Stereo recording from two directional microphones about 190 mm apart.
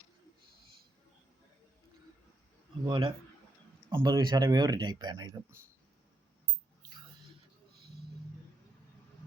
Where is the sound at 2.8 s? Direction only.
25° right (ahead or behind).